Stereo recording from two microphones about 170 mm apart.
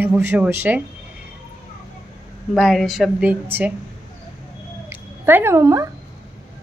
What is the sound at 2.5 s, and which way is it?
A woman's voice, centre (ahead or behind).